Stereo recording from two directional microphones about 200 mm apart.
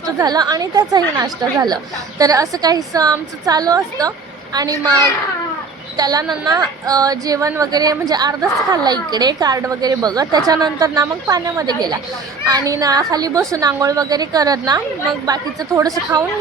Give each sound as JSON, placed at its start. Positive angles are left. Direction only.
{"t": 0.2, "sound": "a woman's voice", "side_deg": -20}
{"t": 6.0, "sound": "a woman's voice", "side_deg": -20}